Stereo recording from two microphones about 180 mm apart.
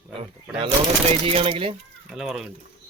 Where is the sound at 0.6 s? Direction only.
30° right (ahead or behind).